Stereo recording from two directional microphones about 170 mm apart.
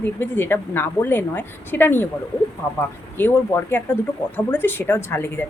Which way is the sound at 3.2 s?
10° left (ahead or behind).